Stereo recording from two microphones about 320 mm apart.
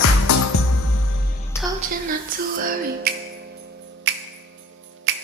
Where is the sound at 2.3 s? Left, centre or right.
Right.